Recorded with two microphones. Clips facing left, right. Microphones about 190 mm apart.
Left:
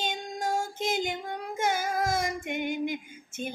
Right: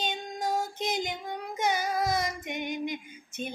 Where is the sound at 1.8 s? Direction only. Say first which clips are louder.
Even; 50° left (ahead or behind).